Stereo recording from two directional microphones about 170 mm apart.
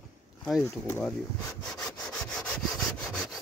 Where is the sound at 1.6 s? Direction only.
5° left (ahead or behind).